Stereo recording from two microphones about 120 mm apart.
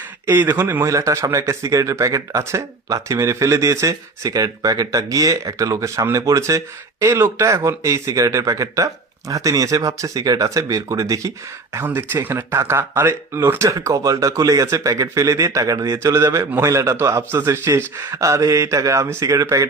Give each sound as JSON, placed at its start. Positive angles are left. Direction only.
{"t": 0.3, "sound": "a man's voice", "side_deg": -20}